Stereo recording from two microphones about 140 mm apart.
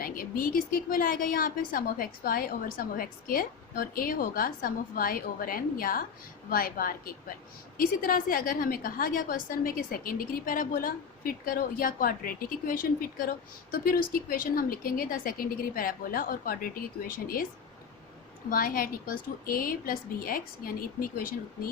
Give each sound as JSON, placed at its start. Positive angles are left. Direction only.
{"t": 0.0, "sound": "a woman's voice", "side_deg": 90}
{"t": 18.5, "sound": "a woman's voice", "side_deg": 90}